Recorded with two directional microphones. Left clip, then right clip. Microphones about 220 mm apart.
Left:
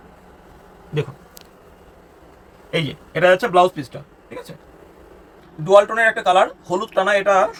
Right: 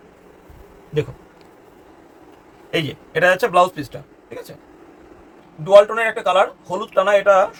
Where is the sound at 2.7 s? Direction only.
40° right (ahead or behind).